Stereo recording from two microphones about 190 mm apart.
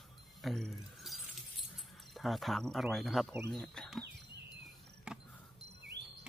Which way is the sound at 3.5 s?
5° left (ahead or behind).